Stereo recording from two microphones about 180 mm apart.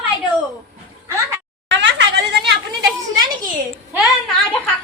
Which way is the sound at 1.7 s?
85° right.